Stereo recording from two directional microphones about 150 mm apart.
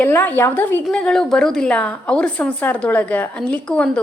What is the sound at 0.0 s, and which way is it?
A woman's voice, 10° left (ahead or behind).